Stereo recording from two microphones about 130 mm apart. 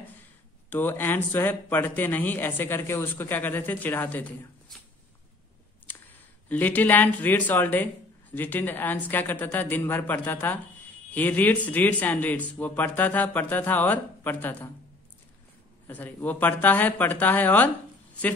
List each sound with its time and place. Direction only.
0.7 s speech: 15° left (ahead or behind)
6.5 s speech: 15° left (ahead or behind)
15.9 s speech: 15° left (ahead or behind)